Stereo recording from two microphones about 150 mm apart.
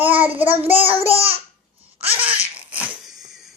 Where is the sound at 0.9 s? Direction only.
40° right (ahead or behind).